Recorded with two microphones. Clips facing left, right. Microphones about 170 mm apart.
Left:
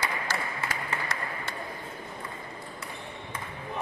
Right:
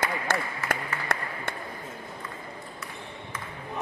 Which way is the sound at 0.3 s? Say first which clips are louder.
Right 7 dB; 55° right (ahead or behind).